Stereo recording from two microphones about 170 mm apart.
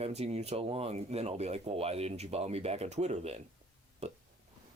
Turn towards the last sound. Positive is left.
turn(degrees=-40)  # may be behind; listen again after turning